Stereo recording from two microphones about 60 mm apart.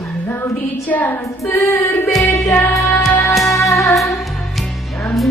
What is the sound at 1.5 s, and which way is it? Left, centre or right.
Music, left.